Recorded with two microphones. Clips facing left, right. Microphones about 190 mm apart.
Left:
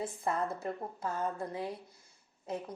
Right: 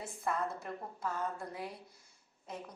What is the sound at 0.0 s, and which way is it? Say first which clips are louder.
A woman's voice: left 3 dB; 25° left (ahead or behind).